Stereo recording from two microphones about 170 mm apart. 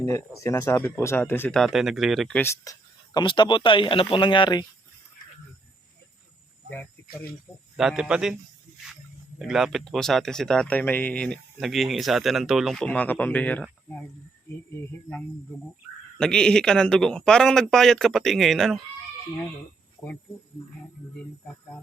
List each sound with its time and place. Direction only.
0.0 s speech: 15° left (ahead or behind); by 2.4 s centre (ahead or behind)
2.4 s speech: 15° left (ahead or behind)
6.7 s speech: 10° left (ahead or behind)
7.8 s speech: 5° right (ahead or behind)
9.4 s speech: centre (ahead or behind)
16.1 s speech: 5° left (ahead or behind)